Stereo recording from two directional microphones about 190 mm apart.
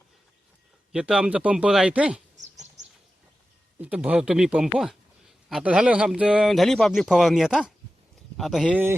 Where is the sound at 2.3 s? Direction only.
40° right (ahead or behind).